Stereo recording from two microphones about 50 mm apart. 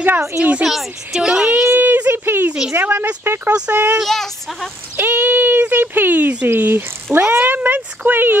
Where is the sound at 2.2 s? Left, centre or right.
Right.